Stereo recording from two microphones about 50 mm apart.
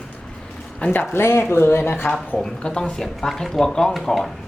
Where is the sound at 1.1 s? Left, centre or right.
Left.